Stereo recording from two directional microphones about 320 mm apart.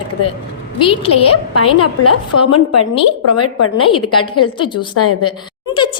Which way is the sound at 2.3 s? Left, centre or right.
Left.